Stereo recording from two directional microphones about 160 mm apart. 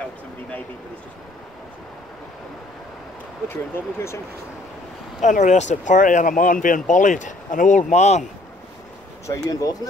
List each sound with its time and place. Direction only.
3.4 s speech: 15° left (ahead or behind)
5.2 s speech: 50° left (ahead or behind)
9.3 s speech: 20° left (ahead or behind)